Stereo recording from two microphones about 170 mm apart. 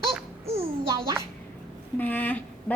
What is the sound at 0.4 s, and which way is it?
Babbling, 35° right (ahead or behind).